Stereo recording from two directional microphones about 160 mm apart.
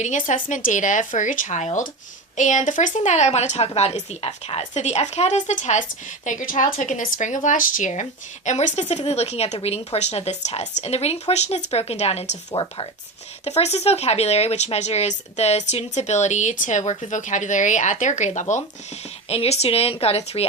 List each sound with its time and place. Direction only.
0.0 s a woman's voice: 50° left (ahead or behind)
12.5 s a woman's voice: 30° left (ahead or behind)
13.4 s speech: 40° left (ahead or behind)
19.3 s a woman's voice: 40° left (ahead or behind)